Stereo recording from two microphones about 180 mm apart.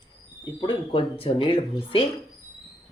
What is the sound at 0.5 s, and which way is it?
Speech, 30° left (ahead or behind).